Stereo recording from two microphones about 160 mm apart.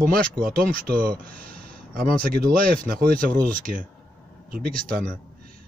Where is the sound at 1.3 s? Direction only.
65° right (ahead or behind).